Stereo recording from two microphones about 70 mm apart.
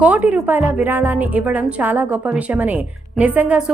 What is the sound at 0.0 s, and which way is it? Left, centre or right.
A woman's voice, right.